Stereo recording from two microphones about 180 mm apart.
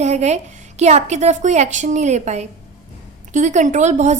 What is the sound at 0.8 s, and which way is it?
A woman's voice, 40° right (ahead or behind).